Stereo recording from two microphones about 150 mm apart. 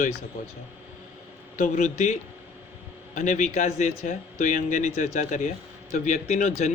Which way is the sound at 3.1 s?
55° left (ahead or behind).